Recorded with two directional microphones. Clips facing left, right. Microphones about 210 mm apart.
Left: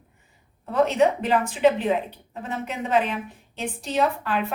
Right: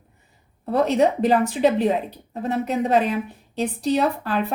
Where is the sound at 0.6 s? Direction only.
35° right (ahead or behind).